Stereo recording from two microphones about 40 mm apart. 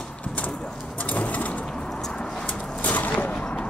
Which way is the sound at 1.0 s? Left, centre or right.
Left.